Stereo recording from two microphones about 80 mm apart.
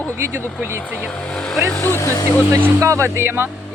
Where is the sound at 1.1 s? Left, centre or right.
Centre.